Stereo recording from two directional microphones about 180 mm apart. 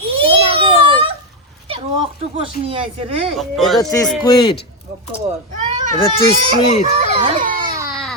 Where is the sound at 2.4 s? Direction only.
30° right (ahead or behind).